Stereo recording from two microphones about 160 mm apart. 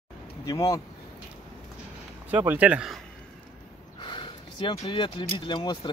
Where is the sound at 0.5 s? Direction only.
20° left (ahead or behind).